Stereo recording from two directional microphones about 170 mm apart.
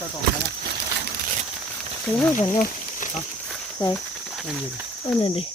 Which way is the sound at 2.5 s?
50° left (ahead or behind).